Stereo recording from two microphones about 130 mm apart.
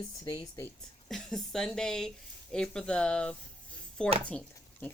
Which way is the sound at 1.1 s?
5° left (ahead or behind).